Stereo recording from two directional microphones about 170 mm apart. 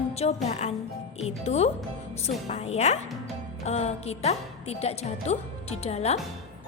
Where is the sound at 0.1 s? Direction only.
40° left (ahead or behind).